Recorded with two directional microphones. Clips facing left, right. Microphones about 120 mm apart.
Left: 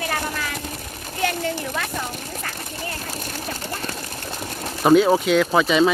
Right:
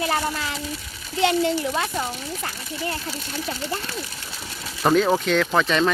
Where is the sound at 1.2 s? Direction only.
20° right (ahead or behind).